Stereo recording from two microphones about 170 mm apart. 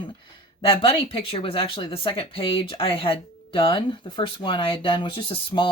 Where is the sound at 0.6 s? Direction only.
30° left (ahead or behind).